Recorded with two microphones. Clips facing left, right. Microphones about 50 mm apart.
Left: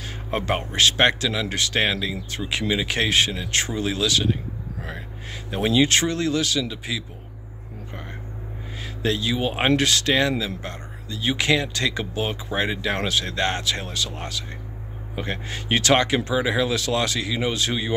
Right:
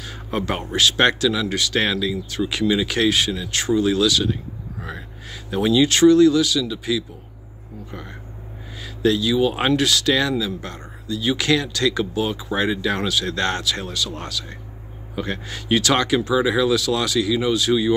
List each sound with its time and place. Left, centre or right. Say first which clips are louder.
0.0 s whispering: right 1 dB; left
0.9 s speech: right 2 dB; left
8.7 s speech: right 6 dB; left